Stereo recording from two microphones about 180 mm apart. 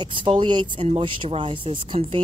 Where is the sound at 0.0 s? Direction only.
25° right (ahead or behind).